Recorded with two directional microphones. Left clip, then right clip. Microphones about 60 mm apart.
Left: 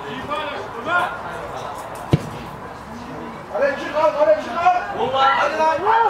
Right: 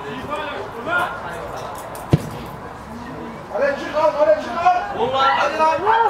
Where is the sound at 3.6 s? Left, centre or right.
Centre.